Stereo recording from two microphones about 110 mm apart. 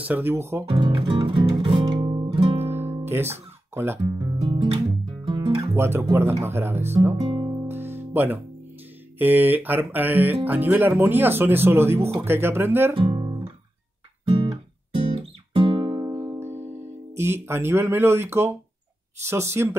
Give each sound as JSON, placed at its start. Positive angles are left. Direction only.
{"t": 0.0, "sound": "speech", "side_deg": -20}
{"t": 0.7, "sound": "music", "side_deg": -50}
{"t": 2.6, "sound": "music", "side_deg": -20}
{"t": 4.0, "sound": "speech", "side_deg": -40}
{"t": 5.2, "sound": "music", "side_deg": -45}
{"t": 5.8, "sound": "speech", "side_deg": -20}
{"t": 7.2, "sound": "music", "side_deg": -50}
{"t": 7.6, "sound": "music", "side_deg": -20}
{"t": 9.2, "sound": "speech", "side_deg": -15}
{"t": 12.9, "sound": "guitar", "side_deg": -50}
{"t": 15.1, "sound": "music", "side_deg": -50}
{"t": 19.2, "sound": "speech", "side_deg": -25}